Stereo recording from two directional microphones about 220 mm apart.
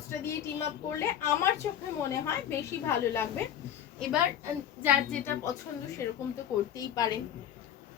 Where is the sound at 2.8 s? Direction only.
10° left (ahead or behind).